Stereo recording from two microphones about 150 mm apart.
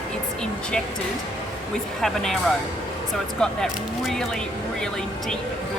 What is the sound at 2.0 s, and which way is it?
Speech, centre (ahead or behind).